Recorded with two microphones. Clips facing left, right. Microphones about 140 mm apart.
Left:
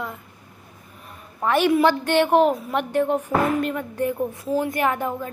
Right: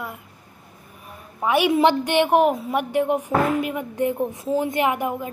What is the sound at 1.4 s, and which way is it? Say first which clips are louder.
A woman's voice: even; 10° right (ahead or behind).